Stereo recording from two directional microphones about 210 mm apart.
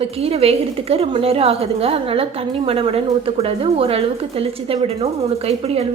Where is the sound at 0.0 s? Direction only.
30° right (ahead or behind).